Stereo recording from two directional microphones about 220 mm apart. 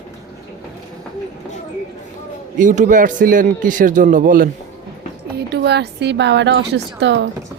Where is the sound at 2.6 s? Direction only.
35° right (ahead or behind).